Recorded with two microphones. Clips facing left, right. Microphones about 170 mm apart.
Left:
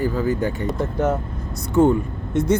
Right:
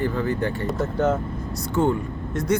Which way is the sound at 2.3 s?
25° left (ahead or behind).